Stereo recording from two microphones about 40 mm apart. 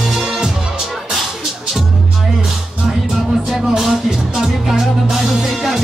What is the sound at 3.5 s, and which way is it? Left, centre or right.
Music, centre.